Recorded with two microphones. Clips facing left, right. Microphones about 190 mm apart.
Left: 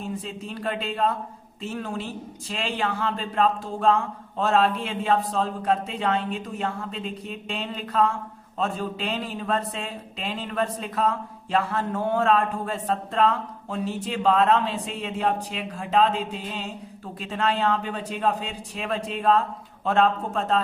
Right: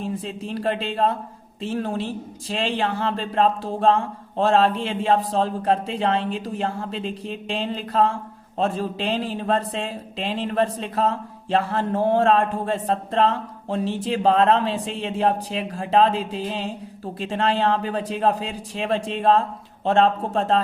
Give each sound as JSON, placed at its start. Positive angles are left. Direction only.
{"t": 0.0, "sound": "a man's voice", "side_deg": -35}